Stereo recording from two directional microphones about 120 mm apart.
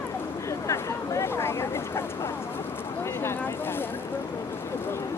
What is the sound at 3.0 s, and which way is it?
Boat, 20° left (ahead or behind).